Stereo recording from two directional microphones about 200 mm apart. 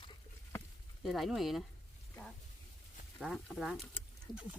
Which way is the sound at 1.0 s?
Centre (ahead or behind).